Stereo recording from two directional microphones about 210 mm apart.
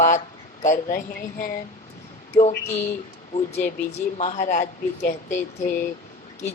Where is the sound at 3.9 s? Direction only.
30° left (ahead or behind).